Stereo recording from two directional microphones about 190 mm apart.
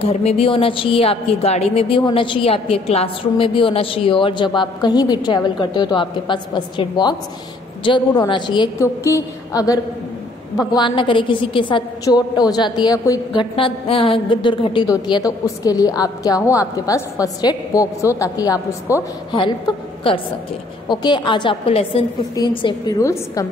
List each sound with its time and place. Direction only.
0.0 s a woman's voice: 35° left (ahead or behind)